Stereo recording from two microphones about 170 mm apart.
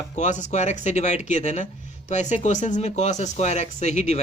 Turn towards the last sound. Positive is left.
turn(degrees=45)  # may be behind; listen again after turning